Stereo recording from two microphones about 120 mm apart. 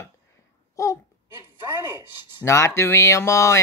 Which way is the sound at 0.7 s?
25° left (ahead or behind).